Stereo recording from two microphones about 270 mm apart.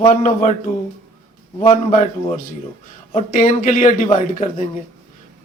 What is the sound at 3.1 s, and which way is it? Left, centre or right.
Speech, left.